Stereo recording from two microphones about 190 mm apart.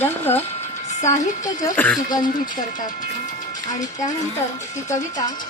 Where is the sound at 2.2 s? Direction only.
45° left (ahead or behind).